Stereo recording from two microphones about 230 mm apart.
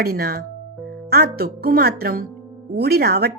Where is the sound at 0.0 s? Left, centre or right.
Right.